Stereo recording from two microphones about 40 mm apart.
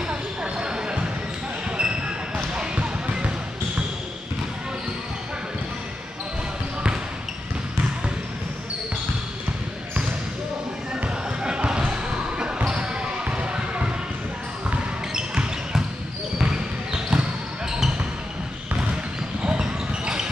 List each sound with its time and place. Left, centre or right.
0.1 s a sound: right
1.8 s basketball bounce: right
11.4 s basketball bounce: right
16.3 s basketball bounce: centre
19.4 s basketball bounce: right